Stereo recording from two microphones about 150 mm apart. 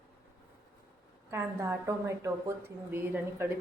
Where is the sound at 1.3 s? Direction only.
20° right (ahead or behind).